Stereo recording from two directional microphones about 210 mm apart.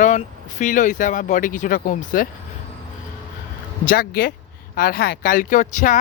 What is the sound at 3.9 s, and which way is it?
Speech, 45° left (ahead or behind).